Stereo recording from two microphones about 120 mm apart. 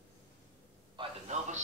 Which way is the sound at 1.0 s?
45° right (ahead or behind).